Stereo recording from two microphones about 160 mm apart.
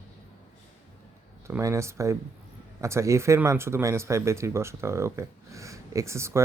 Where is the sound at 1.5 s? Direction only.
15° right (ahead or behind).